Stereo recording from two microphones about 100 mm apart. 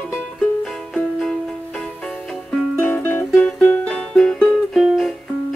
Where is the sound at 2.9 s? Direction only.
20° left (ahead or behind).